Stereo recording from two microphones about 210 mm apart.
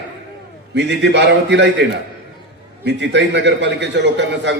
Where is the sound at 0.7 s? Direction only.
55° right (ahead or behind).